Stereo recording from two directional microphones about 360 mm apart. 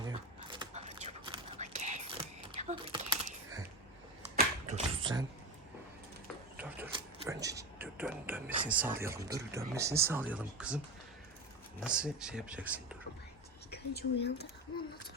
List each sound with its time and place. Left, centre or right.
0.0 s whispering: centre
4.4 s typewriter: centre
6.6 s a sound: centre
8.7 s speech: centre
11.8 s speech: centre
13.7 s speech: left